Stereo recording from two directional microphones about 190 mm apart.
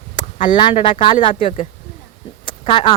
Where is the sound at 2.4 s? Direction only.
25° left (ahead or behind).